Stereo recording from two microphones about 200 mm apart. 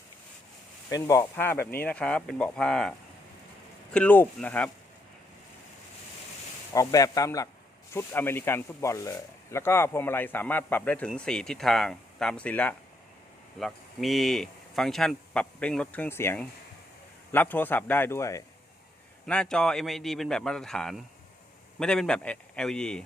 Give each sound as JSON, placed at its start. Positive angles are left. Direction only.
{"t": 0.9, "sound": "speech", "side_deg": 20}
{"t": 3.9, "sound": "speech", "side_deg": 10}
{"t": 6.7, "sound": "speech", "side_deg": 15}
{"t": 19.2, "sound": "speech", "side_deg": 5}